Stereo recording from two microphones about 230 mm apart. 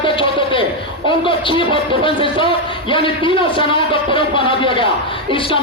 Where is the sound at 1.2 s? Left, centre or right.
Left.